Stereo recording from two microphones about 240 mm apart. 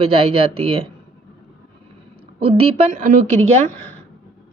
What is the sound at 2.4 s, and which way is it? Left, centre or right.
A woman's voice, right.